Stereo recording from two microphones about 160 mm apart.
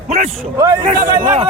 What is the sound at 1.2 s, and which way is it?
Speech, 25° right (ahead or behind).